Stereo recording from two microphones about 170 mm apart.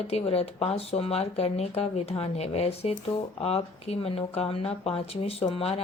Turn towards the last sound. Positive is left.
turn(degrees=35)  # may be behind; listen again after turning